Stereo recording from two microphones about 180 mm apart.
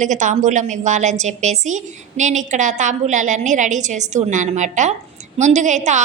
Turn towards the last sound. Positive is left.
turn(degrees=-40)  # may be behind; listen again after turning